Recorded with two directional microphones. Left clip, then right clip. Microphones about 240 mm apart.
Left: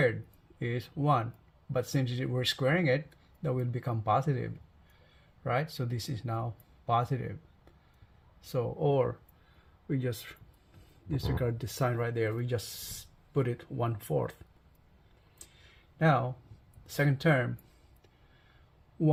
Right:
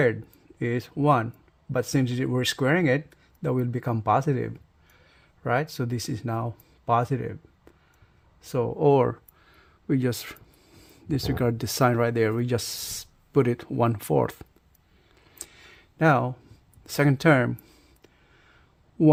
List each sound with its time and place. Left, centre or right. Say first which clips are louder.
0.6 s speech: right 9 dB; right
8.5 s speech: right 8 dB; right
15.4 s a sound: right 10 dB; right
16.8 s speech: right 8 dB; right